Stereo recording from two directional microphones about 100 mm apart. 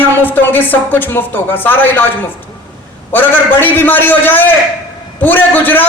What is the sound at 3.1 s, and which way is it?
A man's voice, 20° left (ahead or behind).